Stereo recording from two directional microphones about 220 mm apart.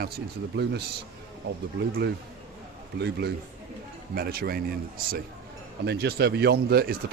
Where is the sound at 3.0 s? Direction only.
50° right (ahead or behind).